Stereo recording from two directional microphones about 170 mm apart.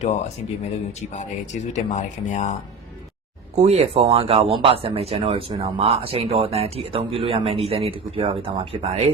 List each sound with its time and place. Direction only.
1.7 s speech: 45° left (ahead or behind)
3.5 s speech: 40° right (ahead or behind)